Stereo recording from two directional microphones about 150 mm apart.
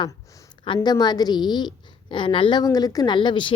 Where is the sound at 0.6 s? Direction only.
30° left (ahead or behind).